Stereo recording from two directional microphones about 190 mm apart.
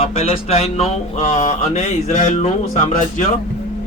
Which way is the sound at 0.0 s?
30° left (ahead or behind).